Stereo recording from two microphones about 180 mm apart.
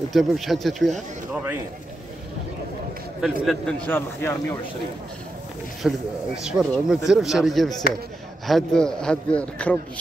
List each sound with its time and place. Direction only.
0.1 s speech: centre (ahead or behind)
3.4 s speech: 5° left (ahead or behind)
5.8 s speech: centre (ahead or behind)